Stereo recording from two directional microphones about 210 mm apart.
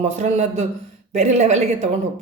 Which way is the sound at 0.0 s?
35° right (ahead or behind).